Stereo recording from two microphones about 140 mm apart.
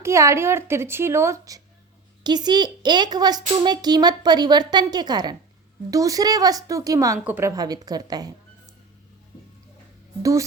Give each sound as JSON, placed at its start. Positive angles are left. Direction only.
{"t": 0.0, "sound": "a woman's voice", "side_deg": -20}